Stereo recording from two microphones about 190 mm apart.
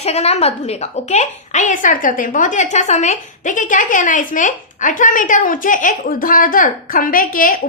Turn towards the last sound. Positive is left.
turn(degrees=45)  # may be behind; listen again after turning